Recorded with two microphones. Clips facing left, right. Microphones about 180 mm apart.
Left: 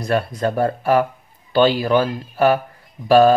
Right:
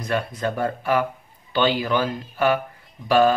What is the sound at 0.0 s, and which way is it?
Speech, 40° left (ahead or behind).